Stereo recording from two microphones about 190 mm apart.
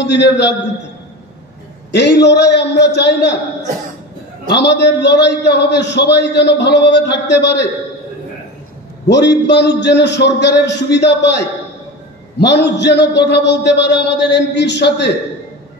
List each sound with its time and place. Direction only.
0.0 s a man's voice: 65° left (ahead or behind)
1.9 s a man's voice: 65° left (ahead or behind)
4.5 s a man's voice: 65° left (ahead or behind)
9.0 s a man's voice: 65° left (ahead or behind)